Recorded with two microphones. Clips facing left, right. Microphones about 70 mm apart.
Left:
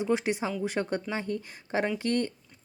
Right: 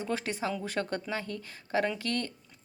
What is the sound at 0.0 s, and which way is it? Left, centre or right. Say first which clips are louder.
Speech: left 5 dB; centre.